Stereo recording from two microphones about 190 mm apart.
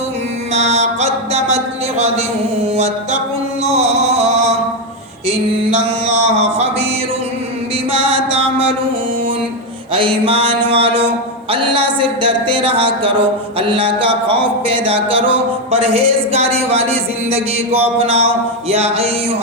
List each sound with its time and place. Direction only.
0.5 s music: 35° right (ahead or behind)
3.6 s chant: 35° right (ahead or behind)
6.2 s a sound: 35° right (ahead or behind)
7.9 s music: 30° right (ahead or behind)
10.7 s music: 30° right (ahead or behind)
11.5 s a sound: 30° right (ahead or behind)